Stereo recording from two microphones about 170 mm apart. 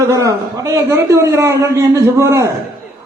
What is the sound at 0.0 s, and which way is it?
A man's voice, 20° right (ahead or behind).